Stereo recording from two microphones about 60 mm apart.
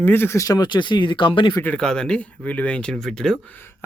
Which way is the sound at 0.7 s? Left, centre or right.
Left.